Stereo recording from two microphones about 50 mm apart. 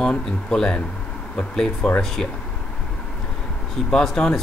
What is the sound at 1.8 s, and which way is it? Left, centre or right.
Speech, centre.